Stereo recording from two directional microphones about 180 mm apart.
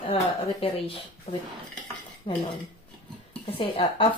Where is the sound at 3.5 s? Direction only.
30° left (ahead or behind).